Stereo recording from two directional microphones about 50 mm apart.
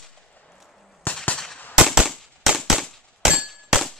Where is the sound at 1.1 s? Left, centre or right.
Left.